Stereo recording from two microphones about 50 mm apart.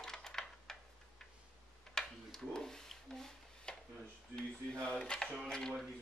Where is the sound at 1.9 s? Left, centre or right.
Centre.